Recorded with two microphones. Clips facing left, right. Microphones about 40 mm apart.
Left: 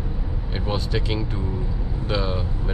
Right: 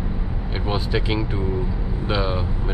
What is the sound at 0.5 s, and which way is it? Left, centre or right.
Speech, centre.